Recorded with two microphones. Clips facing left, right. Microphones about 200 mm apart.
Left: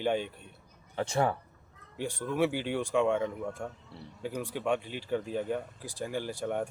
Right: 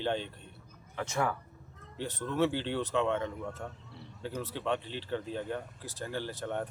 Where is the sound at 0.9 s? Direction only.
30° left (ahead or behind).